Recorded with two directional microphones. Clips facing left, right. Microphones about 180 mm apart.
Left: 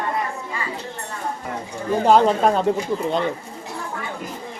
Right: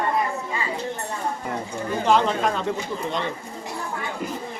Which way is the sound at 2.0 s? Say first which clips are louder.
Left 5 dB; 40° left (ahead or behind).